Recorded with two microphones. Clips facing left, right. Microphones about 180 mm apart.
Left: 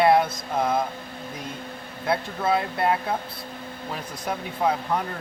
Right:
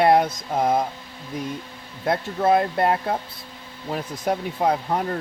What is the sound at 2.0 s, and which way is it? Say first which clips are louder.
Speech: right 4 dB; 45° right (ahead or behind).